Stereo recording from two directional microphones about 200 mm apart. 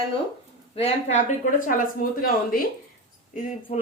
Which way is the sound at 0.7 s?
30° left (ahead or behind).